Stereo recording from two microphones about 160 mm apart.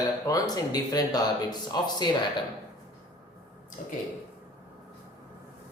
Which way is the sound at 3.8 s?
55° left (ahead or behind).